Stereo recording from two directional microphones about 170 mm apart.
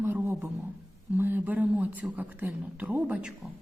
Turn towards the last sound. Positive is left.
turn(degrees=-5)  # may be behind; listen again after turning